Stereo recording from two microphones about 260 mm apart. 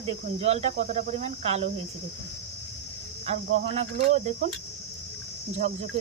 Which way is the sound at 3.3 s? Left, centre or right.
Right.